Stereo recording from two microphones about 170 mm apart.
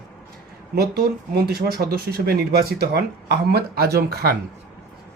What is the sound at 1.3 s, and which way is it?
Speech, 70° right (ahead or behind).